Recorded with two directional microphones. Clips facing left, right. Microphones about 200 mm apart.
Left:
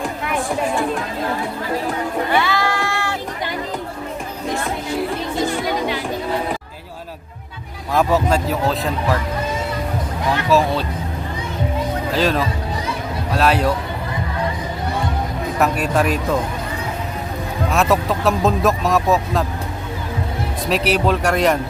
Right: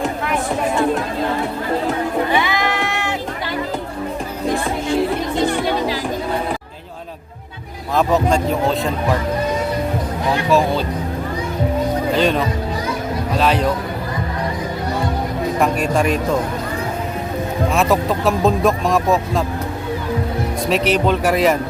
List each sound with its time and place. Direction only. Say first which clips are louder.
2.3 s sheep: even; 15° right (ahead or behind)
5.6 s music: right 2 dB; 35° right (ahead or behind)
7.9 s speech: right 1 dB; 5° left (ahead or behind)
10.5 s speech: even; centre (ahead or behind)
12.1 s speech: even; centre (ahead or behind)
15.5 s speech: even; 5° left (ahead or behind)
17.7 s speech: even; centre (ahead or behind)
20.7 s speech: right 1 dB; centre (ahead or behind)